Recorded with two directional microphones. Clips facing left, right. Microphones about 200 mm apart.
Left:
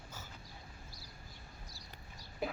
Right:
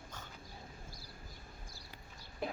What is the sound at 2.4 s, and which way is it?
Chicken, 5° left (ahead or behind).